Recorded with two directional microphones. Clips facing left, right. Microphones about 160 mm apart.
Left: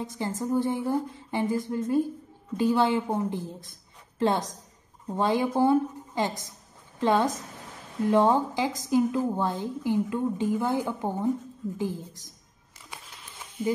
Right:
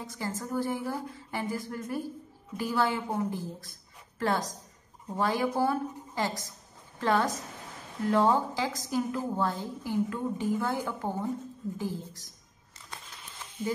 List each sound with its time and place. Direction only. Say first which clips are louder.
0.0 s a woman's voice: left 5 dB; 20° left (ahead or behind)